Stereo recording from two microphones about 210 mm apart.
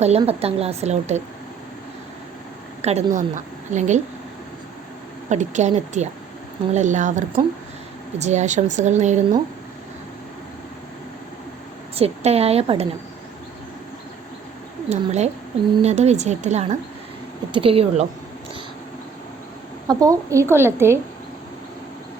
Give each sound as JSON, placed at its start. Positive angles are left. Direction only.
{"t": 0.0, "sound": "a woman's voice", "side_deg": -30}
{"t": 2.8, "sound": "a woman's voice", "side_deg": -30}
{"t": 5.3, "sound": "a woman's voice", "side_deg": -35}
{"t": 11.9, "sound": "a woman's voice", "side_deg": -30}
{"t": 14.8, "sound": "a woman's voice", "side_deg": -30}
{"t": 19.9, "sound": "a woman's voice", "side_deg": -15}